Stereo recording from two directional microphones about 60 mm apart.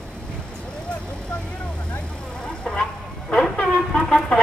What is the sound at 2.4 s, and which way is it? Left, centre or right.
Vehicle, centre.